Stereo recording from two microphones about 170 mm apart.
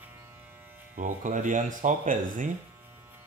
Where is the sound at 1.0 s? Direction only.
50° right (ahead or behind).